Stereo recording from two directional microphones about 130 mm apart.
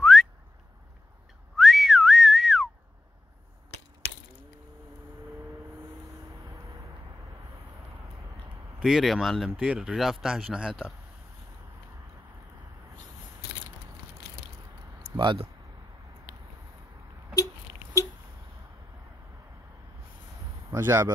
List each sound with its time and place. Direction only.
0.0 s whistling: centre (ahead or behind)
1.6 s whistling: centre (ahead or behind)
8.7 s speech: 5° right (ahead or behind)
15.1 s speech: 35° right (ahead or behind)
20.7 s speech: 20° right (ahead or behind)